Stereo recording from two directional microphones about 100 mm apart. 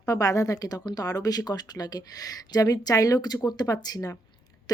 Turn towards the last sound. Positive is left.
turn(degrees=35)  # may be behind; listen again after turning